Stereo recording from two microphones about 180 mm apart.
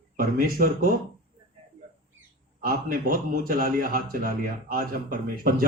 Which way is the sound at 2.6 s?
50° right (ahead or behind).